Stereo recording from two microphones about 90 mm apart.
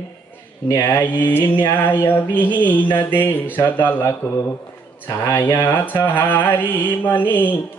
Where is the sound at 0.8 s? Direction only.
30° left (ahead or behind).